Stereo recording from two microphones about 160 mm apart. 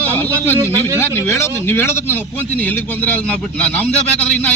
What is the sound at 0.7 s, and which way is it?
Speech, 15° right (ahead or behind).